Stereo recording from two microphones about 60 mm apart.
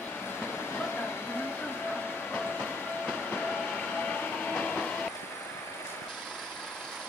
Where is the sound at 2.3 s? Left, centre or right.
Left.